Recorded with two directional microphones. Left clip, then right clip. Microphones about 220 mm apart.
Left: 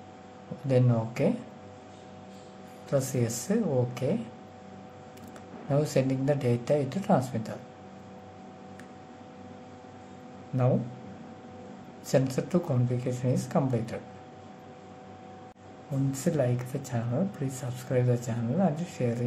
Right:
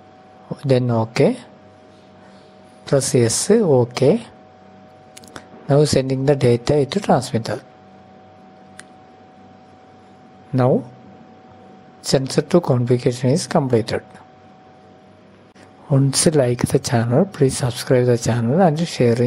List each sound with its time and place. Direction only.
0.7 s speech: 40° right (ahead or behind)
2.9 s speech: 40° right (ahead or behind)
5.3 s speech: 40° right (ahead or behind)
12.0 s speech: 40° right (ahead or behind)
16.1 s speech: 45° right (ahead or behind)